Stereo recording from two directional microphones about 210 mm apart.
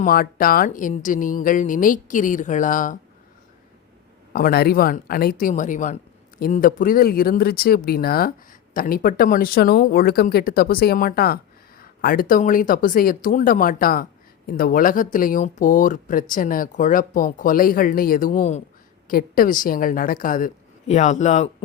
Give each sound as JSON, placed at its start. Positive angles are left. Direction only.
{"t": 0.0, "sound": "speech", "side_deg": 45}
{"t": 4.3, "sound": "speech", "side_deg": 45}